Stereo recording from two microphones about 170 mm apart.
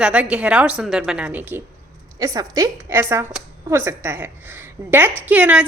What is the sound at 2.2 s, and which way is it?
A woman's voice, 20° right (ahead or behind).